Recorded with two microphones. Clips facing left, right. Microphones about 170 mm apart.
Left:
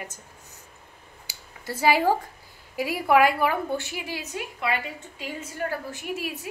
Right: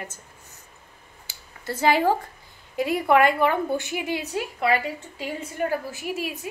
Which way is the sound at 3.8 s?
20° right (ahead or behind).